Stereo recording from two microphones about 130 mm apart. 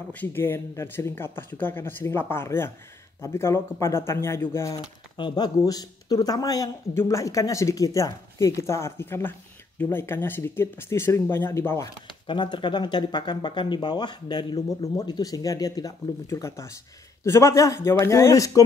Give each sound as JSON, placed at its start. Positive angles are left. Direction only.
{"t": 0.1, "sound": "speech", "side_deg": 15}
{"t": 5.1, "sound": "speech", "side_deg": 35}
{"t": 12.3, "sound": "speech", "side_deg": 35}